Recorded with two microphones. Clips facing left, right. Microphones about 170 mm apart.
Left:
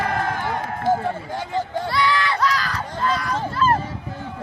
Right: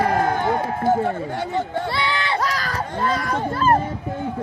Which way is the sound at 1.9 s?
30° right (ahead or behind).